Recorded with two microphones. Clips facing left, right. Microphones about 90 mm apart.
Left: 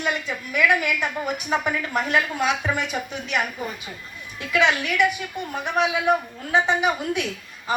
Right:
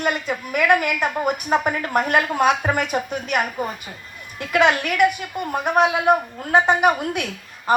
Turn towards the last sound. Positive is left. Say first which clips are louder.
# right 4 dB
turn(degrees=-55)  # may be behind; listen again after turning